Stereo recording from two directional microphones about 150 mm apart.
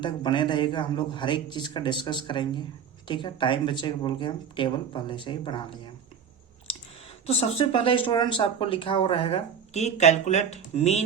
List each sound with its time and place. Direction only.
0.0 s speech: 30° left (ahead or behind)
7.3 s speech: 45° left (ahead or behind)